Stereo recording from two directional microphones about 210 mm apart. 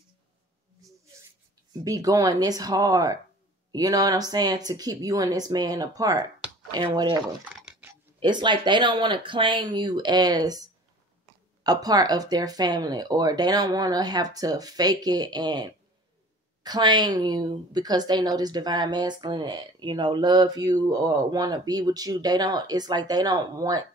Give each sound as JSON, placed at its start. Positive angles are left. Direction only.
{"t": 1.7, "sound": "a woman's voice", "side_deg": -15}
{"t": 7.6, "sound": "typing", "side_deg": -10}
{"t": 8.2, "sound": "a woman's voice", "side_deg": -20}